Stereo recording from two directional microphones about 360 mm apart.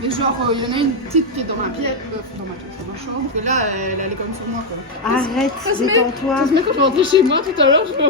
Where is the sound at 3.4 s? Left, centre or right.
Centre.